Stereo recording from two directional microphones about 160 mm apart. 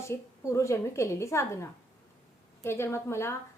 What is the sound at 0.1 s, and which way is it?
A woman's voice, 20° left (ahead or behind).